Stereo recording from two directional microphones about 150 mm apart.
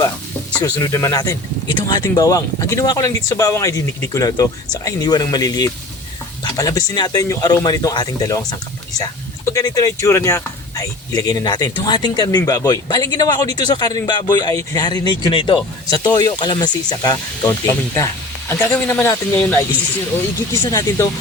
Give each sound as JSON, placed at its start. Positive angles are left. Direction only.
{"t": 0.6, "sound": "speech", "side_deg": 20}